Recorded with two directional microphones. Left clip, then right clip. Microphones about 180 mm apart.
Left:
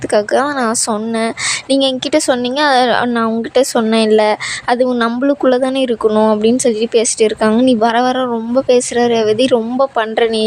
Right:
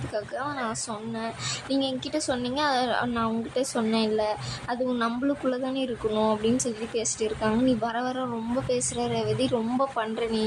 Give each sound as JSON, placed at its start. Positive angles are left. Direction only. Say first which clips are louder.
{"t": 0.1, "sound": "a woman's voice", "louder": "left 18 dB", "side_deg": 50}
{"t": 1.7, "sound": "a woman's voice", "louder": "left 15 dB", "side_deg": 45}